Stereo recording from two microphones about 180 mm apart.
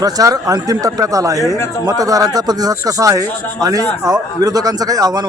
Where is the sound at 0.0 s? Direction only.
20° right (ahead or behind).